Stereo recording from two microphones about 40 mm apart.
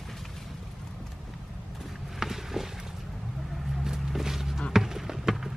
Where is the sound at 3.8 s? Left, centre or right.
Centre.